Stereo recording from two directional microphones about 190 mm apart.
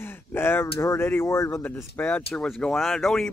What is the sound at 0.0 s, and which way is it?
Speech, 10° left (ahead or behind).